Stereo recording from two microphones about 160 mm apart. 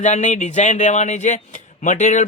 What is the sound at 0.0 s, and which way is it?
A man's voice, 45° left (ahead or behind).